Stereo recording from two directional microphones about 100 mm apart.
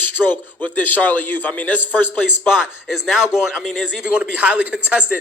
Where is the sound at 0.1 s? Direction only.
20° left (ahead or behind).